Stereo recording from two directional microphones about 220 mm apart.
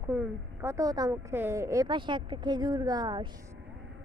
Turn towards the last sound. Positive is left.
turn(degrees=-20)  # may be behind; listen again after turning